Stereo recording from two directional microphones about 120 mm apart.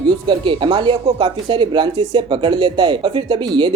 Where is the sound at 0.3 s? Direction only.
45° right (ahead or behind).